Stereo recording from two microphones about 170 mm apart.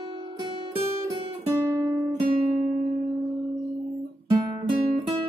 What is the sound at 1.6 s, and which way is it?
Guitar, 15° right (ahead or behind).